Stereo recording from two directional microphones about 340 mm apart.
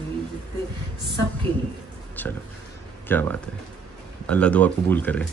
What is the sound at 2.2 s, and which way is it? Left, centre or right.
Speech, centre.